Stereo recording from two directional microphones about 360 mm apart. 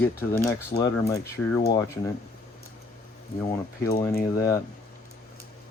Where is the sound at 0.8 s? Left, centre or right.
Centre.